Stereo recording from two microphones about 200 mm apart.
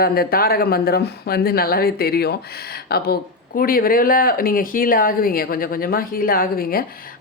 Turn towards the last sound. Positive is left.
turn(degrees=45)  # may be behind; listen again after turning